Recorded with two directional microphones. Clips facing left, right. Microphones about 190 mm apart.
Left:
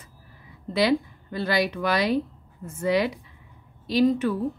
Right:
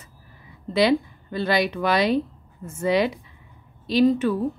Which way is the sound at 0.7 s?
25° right (ahead or behind).